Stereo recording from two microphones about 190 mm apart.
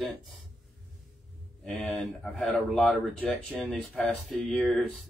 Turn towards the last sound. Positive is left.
turn(degrees=5)  # may be behind; listen again after turning